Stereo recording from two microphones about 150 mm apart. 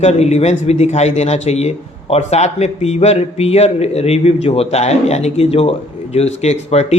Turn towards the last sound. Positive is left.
turn(degrees=50)  # may be behind; listen again after turning